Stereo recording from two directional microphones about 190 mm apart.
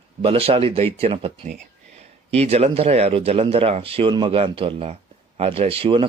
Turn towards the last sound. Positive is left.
turn(degrees=-30)  # may be behind; listen again after turning